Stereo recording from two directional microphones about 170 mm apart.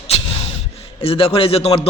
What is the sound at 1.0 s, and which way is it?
Speech, 35° left (ahead or behind).